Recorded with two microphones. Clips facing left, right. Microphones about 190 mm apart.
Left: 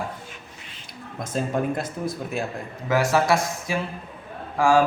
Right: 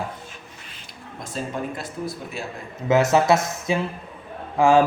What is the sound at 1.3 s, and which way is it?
Speech, 50° left (ahead or behind).